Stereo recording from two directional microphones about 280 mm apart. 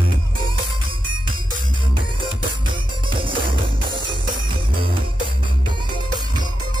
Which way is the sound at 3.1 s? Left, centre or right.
Centre.